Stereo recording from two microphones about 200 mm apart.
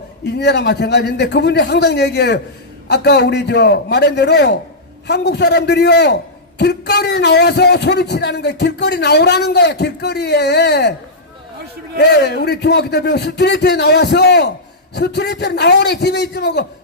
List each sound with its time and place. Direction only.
0.3 s a man's voice: 60° left (ahead or behind)
11.9 s a man's voice: 55° left (ahead or behind)